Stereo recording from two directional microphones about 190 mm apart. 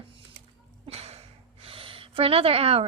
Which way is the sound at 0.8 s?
30° right (ahead or behind).